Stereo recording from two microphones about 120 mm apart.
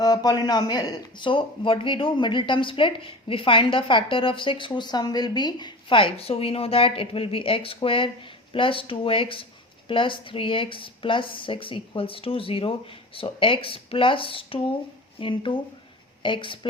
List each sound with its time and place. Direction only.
0.0 s speech: 35° left (ahead or behind)